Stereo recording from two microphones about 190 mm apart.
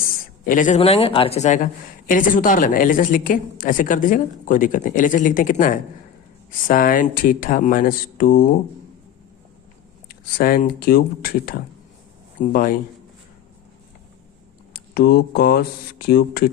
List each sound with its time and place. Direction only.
0.4 s speech: 45° left (ahead or behind)
0.8 s speech: 30° left (ahead or behind); by 8.5 s 50° left (ahead or behind)
10.1 s speech: 50° left (ahead or behind)
14.7 s speech: 55° left (ahead or behind)